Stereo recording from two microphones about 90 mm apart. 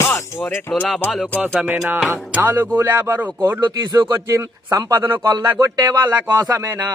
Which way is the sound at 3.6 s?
50° right (ahead or behind).